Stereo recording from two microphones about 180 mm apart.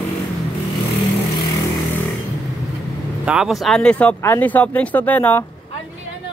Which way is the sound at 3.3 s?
5° right (ahead or behind).